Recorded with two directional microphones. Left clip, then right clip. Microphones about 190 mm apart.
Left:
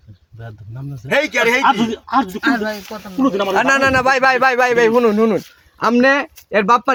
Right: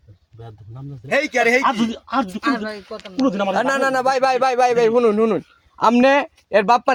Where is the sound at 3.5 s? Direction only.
40° right (ahead or behind).